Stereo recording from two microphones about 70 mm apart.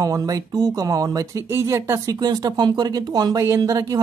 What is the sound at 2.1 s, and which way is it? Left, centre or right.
Speech, right.